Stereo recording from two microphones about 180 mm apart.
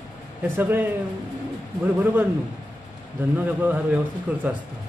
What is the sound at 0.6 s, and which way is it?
Speech, 10° right (ahead or behind).